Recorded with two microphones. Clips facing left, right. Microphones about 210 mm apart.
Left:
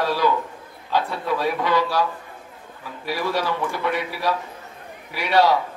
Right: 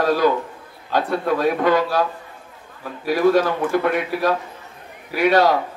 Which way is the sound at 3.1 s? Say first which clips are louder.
Right 8 dB; 50° right (ahead or behind).